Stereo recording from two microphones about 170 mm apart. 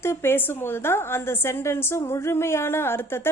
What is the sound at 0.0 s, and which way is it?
A woman's voice, 15° left (ahead or behind).